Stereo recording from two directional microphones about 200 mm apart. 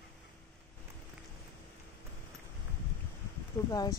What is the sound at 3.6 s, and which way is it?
Speech, 10° left (ahead or behind).